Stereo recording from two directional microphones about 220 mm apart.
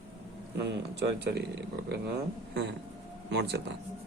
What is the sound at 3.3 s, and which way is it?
Speech, 50° right (ahead or behind).